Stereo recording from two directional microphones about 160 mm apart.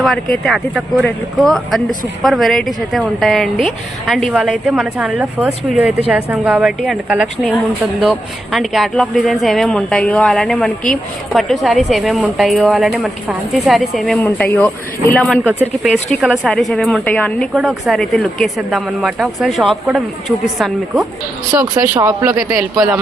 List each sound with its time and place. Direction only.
0.0 s speech: centre (ahead or behind)
8.5 s speech: centre (ahead or behind)
14.2 s speech: 10° left (ahead or behind)
15.4 s speech: 5° right (ahead or behind)
17.5 s speech: centre (ahead or behind)